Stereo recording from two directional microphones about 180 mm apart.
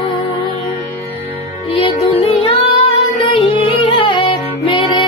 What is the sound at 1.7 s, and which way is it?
Music, 30° left (ahead or behind).